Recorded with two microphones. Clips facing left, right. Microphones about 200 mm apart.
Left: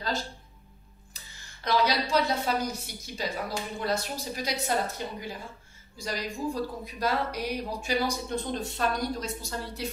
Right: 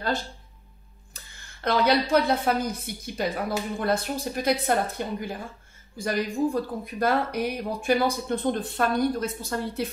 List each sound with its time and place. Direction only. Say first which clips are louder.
1.1 s speech: right 3 dB; 55° right (ahead or behind)